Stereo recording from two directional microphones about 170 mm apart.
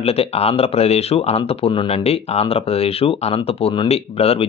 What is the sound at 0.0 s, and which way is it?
Speech, 35° left (ahead or behind).